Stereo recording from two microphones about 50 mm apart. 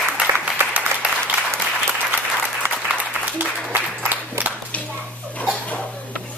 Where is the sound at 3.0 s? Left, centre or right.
Right.